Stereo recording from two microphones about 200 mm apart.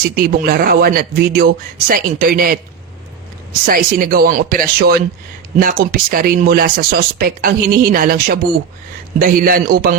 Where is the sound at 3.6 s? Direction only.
45° right (ahead or behind).